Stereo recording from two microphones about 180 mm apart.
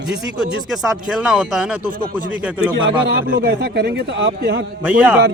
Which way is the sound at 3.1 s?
65° right (ahead or behind).